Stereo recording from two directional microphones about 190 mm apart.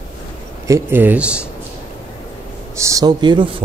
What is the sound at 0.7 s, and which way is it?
Speech, 10° right (ahead or behind).